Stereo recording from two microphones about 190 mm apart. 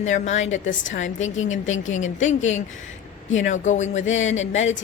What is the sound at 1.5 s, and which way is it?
Speech, 90° left.